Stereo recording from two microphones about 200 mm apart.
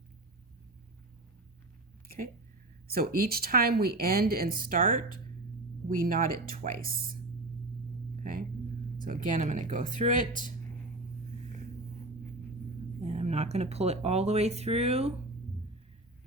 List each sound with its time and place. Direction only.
2.0 s speech: 45° right (ahead or behind)
8.2 s speech: 45° right (ahead or behind)
13.1 s speech: 35° right (ahead or behind)